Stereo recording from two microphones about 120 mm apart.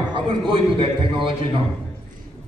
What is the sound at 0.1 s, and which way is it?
A man's voice, 45° right (ahead or behind).